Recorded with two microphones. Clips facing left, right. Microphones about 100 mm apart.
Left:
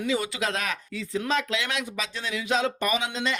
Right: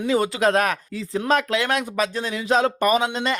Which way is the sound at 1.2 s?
50° right (ahead or behind).